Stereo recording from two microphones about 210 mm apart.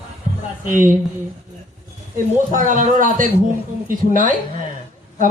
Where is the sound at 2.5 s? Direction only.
40° right (ahead or behind).